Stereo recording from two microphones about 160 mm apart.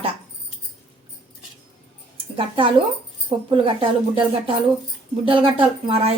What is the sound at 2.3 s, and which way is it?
Speech, 35° right (ahead or behind).